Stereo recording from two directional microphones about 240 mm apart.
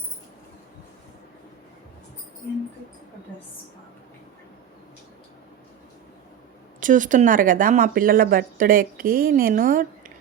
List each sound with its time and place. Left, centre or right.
6.7 s speech: right